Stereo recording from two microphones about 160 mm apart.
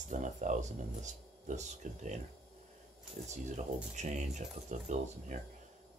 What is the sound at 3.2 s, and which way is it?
Speech, 45° right (ahead or behind).